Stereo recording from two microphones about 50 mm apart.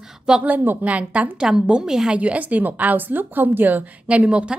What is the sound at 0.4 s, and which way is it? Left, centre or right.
Speech, right.